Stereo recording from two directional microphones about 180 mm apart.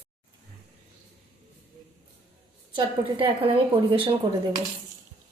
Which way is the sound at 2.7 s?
30° right (ahead or behind).